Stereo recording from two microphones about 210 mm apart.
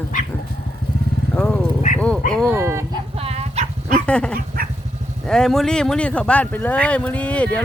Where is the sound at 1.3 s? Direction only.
5° left (ahead or behind).